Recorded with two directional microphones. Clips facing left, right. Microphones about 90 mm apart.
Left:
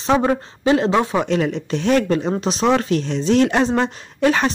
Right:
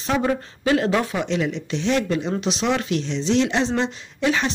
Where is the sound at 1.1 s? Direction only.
45° left (ahead or behind).